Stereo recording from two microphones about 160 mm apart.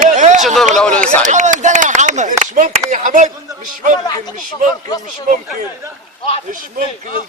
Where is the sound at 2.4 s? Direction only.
50° right (ahead or behind).